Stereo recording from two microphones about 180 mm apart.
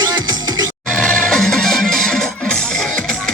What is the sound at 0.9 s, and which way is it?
Music, 5° left (ahead or behind).